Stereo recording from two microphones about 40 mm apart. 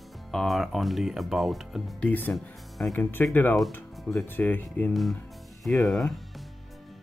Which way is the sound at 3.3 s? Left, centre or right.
Left.